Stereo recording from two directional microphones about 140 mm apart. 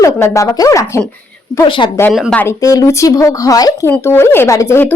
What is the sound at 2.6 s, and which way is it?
Speech, 25° left (ahead or behind).